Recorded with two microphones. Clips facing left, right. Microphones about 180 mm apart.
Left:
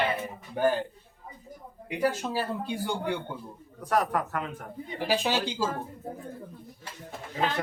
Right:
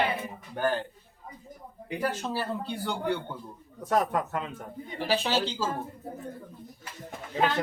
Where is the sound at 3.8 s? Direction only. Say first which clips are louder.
Even; 25° right (ahead or behind).